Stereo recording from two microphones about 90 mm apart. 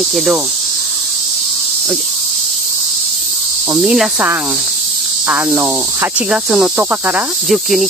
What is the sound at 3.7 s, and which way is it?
Speech, 10° right (ahead or behind).